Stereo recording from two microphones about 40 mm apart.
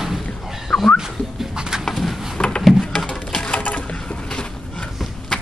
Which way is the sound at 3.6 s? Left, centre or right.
Left.